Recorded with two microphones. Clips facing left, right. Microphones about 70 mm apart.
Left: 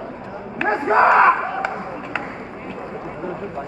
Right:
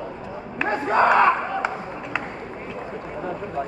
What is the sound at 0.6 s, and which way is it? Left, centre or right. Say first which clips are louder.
Battle cry: left 4 dB; left.